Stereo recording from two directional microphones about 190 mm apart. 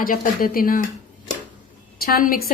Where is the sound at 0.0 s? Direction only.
50° left (ahead or behind).